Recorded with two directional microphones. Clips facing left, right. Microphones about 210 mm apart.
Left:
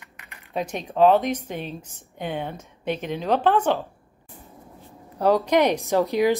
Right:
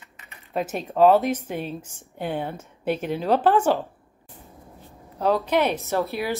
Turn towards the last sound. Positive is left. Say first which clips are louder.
# left 5 dB
turn(degrees=15)  # may be behind; listen again after turning